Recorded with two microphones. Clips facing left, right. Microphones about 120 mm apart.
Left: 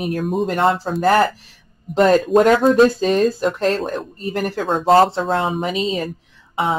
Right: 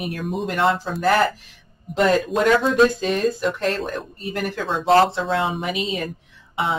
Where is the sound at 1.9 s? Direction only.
40° left (ahead or behind).